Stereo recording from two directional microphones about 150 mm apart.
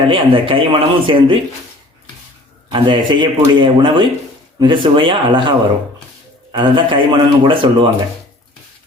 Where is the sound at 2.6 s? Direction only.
30° right (ahead or behind).